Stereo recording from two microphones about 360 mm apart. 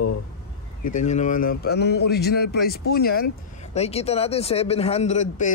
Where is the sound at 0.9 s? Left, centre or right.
Centre.